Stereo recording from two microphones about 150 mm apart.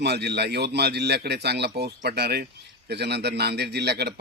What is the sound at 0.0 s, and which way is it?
A man's voice, 90° right.